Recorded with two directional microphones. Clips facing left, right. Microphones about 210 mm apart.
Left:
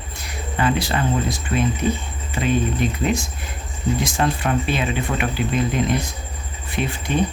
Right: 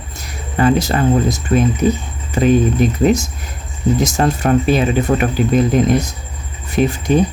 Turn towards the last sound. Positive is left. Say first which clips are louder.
# right 9 dB
turn(degrees=-40)  # may be behind; listen again after turning